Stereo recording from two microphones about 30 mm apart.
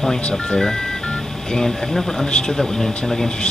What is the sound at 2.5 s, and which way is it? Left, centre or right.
Speech, centre.